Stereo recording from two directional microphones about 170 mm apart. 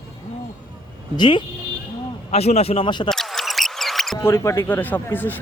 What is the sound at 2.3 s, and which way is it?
Speech, 40° left (ahead or behind).